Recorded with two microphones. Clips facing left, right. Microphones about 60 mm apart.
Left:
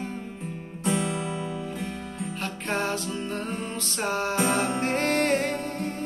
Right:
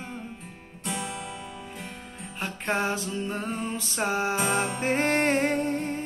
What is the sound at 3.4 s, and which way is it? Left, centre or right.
Music, centre.